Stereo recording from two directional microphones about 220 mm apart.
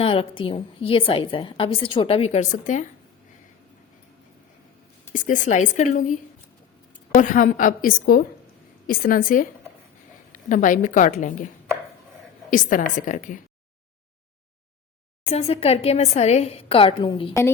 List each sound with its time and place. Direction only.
0.0 s a woman's voice: 25° left (ahead or behind)
5.1 s a woman's voice: 35° left (ahead or behind)
7.2 s a woman's voice: 35° left (ahead or behind)
12.5 s a woman's voice: 35° left (ahead or behind)
15.2 s a woman's voice: 30° left (ahead or behind)